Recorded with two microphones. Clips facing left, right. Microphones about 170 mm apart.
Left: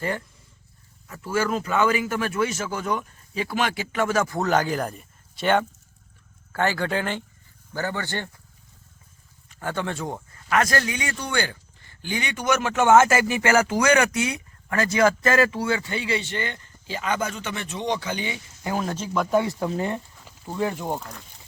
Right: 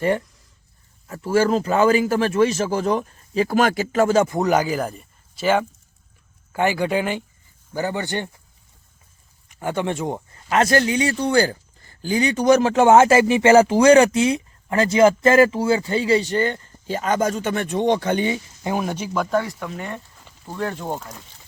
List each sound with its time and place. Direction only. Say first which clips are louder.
1.0 s speech: right 7 dB; 35° right (ahead or behind)
4.4 s speech: right 3 dB; 10° right (ahead or behind)
6.5 s speech: right 4 dB; 15° right (ahead or behind)
9.5 s speech: right 5 dB; 15° right (ahead or behind); by 18.3 s 50° right (ahead or behind)
18.6 s speech: right 2 dB; 15° right (ahead or behind)
19.5 s speech: left 4 dB; 30° left (ahead or behind)
20.1 s a sound: left 1 dB; centre (ahead or behind)
20.5 s speech: even; 15° left (ahead or behind)
21.0 s speech: right 1 dB; centre (ahead or behind)